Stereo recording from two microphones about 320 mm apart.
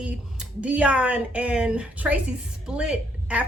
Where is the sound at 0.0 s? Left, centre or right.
Centre.